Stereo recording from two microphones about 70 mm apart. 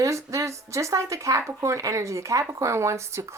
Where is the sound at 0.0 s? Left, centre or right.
Right.